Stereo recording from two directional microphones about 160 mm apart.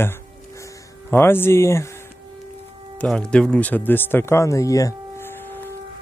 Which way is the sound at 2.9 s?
5° left (ahead or behind).